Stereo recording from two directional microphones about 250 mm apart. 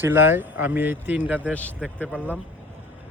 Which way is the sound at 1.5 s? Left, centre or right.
Centre.